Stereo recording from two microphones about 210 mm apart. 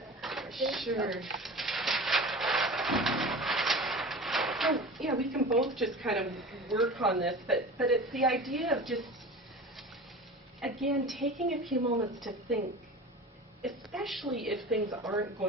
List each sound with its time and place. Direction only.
0.2 s a sound: centre (ahead or behind)
6.0 s a woman's voice: centre (ahead or behind)
10.6 s a woman's voice: centre (ahead or behind)
11.7 s a woman's voice: 40° right (ahead or behind)
13.6 s a woman's voice: centre (ahead or behind)
14.8 s speech: 15° right (ahead or behind)